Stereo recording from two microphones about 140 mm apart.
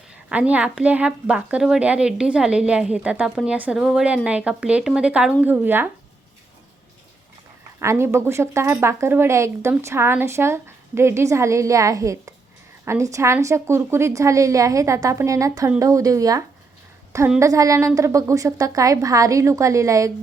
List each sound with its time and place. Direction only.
0.3 s a woman's voice: 10° right (ahead or behind)
7.8 s a woman's voice: 20° right (ahead or behind)